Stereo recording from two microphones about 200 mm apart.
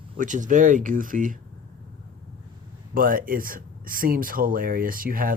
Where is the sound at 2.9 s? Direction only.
45° right (ahead or behind).